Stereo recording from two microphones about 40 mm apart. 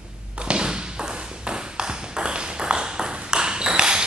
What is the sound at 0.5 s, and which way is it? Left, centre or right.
Ping, right.